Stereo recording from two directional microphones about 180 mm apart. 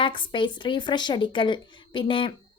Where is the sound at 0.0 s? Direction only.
25° left (ahead or behind).